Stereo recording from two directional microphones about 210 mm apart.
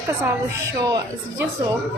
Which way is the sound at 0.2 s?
15° right (ahead or behind).